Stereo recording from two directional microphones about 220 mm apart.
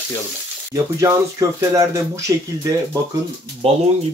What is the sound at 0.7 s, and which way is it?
Speech, 15° right (ahead or behind).